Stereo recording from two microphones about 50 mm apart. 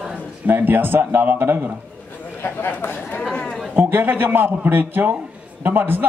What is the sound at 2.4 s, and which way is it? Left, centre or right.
Speech, left.